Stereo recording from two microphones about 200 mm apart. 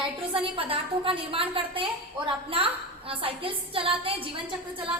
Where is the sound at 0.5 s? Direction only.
25° right (ahead or behind).